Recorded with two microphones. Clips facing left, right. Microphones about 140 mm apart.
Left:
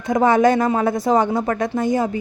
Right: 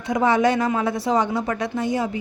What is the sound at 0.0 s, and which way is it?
A woman's voice, 45° left (ahead or behind).